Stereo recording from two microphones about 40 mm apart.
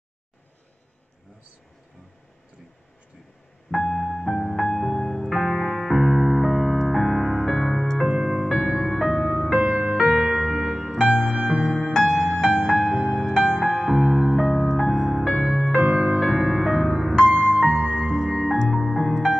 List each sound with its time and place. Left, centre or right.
3.7 s music: centre
5.3 s music: centre
8.1 s music: centre
9.6 s music: right
10.0 s keyboard: centre
11.1 s music: centre
13.7 s music: centre
15.8 s music: right
16.2 s music: centre
17.1 s music: centre
17.6 s music: centre